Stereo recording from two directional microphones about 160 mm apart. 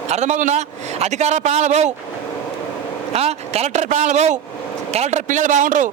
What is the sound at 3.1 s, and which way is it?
A man's voice, 40° right (ahead or behind).